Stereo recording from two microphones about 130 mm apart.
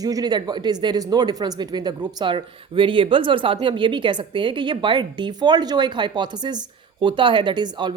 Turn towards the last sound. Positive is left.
turn(degrees=-35)  # may be behind; listen again after turning